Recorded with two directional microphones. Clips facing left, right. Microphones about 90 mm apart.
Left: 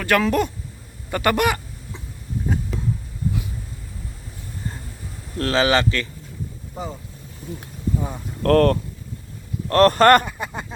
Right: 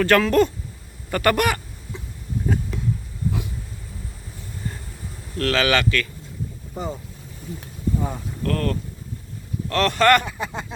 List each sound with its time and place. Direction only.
0.0 s speech: 10° left (ahead or behind)
1.1 s fowl: 20° left (ahead or behind)
2.7 s a sound: centre (ahead or behind)
5.4 s speech: 25° left (ahead or behind)
6.8 s speech: centre (ahead or behind)
8.4 s speech: 55° left (ahead or behind)
9.6 s speech: 40° left (ahead or behind)
10.2 s speech: 5° left (ahead or behind)